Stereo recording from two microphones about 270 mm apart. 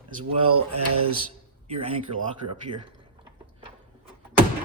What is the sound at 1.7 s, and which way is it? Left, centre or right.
Speech, right.